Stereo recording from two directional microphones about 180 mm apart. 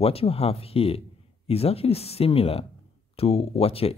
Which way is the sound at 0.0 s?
35° left (ahead or behind).